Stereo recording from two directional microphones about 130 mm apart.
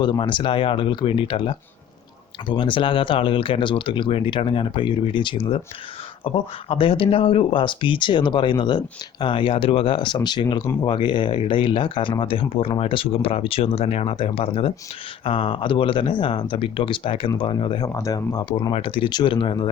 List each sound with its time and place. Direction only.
0.0 s speech: 40° left (ahead or behind)
17.8 s speech: 25° left (ahead or behind)